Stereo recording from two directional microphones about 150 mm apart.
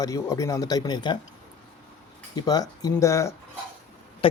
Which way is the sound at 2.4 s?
25° left (ahead or behind).